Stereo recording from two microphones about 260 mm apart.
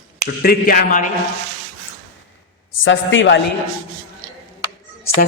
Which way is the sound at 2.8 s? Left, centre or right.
Left.